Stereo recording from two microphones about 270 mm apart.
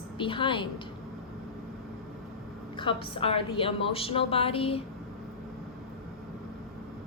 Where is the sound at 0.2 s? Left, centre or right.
Centre.